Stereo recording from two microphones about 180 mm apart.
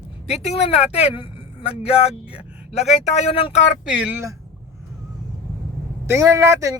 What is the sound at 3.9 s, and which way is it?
Speech, 10° right (ahead or behind).